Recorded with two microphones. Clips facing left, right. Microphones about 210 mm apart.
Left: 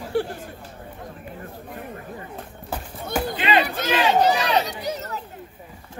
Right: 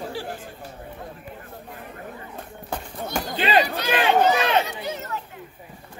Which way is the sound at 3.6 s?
50° left (ahead or behind).